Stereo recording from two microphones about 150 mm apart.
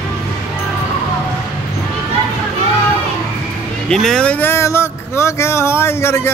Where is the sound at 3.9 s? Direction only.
5° left (ahead or behind).